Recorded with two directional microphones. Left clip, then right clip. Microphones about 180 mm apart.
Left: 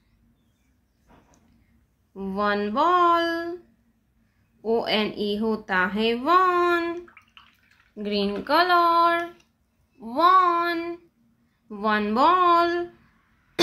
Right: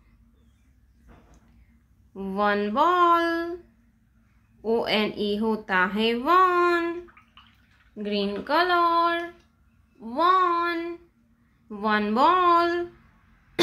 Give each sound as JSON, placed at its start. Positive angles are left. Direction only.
{"t": 2.1, "sound": "speech", "side_deg": 0}
{"t": 4.6, "sound": "speech", "side_deg": 0}
{"t": 9.9, "sound": "child singing", "side_deg": 15}
{"t": 11.7, "sound": "speech", "side_deg": 5}